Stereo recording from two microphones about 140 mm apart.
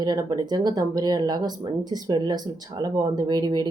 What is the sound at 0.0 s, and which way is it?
Speech, 30° right (ahead or behind).